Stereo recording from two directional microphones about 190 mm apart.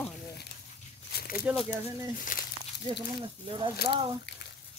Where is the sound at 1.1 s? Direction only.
55° left (ahead or behind).